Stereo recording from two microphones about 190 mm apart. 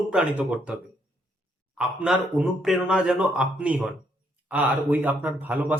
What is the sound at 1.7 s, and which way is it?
Speech, 5° right (ahead or behind).